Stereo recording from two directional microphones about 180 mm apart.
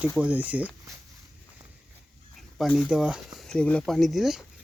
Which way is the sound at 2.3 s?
Centre (ahead or behind).